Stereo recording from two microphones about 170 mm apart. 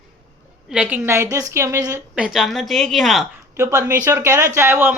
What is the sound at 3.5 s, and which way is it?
Speech, 20° right (ahead or behind).